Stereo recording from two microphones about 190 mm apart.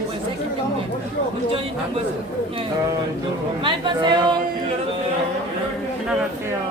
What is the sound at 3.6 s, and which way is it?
Speech, 25° right (ahead or behind).